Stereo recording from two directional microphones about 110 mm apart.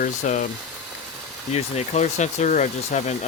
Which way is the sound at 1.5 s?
80° left.